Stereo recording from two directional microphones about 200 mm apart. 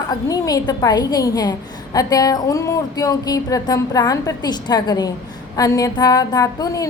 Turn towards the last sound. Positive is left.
turn(degrees=15)  # may be behind; listen again after turning